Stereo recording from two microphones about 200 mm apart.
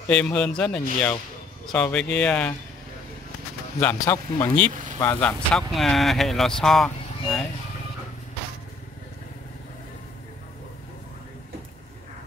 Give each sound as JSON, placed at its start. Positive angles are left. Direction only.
{"t": 0.1, "sound": "speech", "side_deg": 5}
{"t": 3.8, "sound": "speech", "side_deg": 15}